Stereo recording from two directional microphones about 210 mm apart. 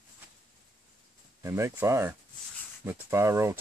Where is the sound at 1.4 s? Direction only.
15° right (ahead or behind).